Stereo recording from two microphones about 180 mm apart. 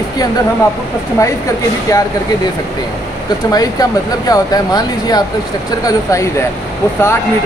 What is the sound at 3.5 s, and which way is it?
Speech, 20° left (ahead or behind).